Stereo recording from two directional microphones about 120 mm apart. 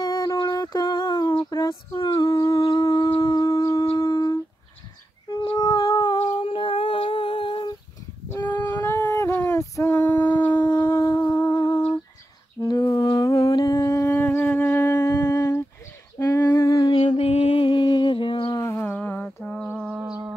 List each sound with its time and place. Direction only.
0.0 s a sound: 30° left (ahead or behind)
3.2 s shofar: 30° left (ahead or behind)
4.0 s humming: 30° left (ahead or behind)
5.6 s howl: 30° left (ahead or behind)
6.1 s humming: 45° left (ahead or behind)
8.4 s female singing: 35° left (ahead or behind)
8.8 s female singing: 25° left (ahead or behind)
10.4 s shofar: 20° left (ahead or behind)
12.6 s humming: 35° left (ahead or behind)
14.1 s humming: 15° left (ahead or behind)
16.3 s female singing: 20° left (ahead or behind)
17.0 s a sound: 60° left (ahead or behind); by 18.6 s 45° left (ahead or behind)
18.6 s humming: 20° left (ahead or behind)
19.9 s a sound: 10° right (ahead or behind)